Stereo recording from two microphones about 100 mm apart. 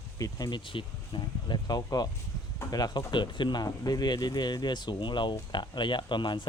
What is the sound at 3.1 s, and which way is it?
Speech, 50° left (ahead or behind).